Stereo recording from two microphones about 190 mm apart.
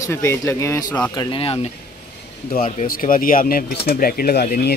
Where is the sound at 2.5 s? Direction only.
50° left (ahead or behind).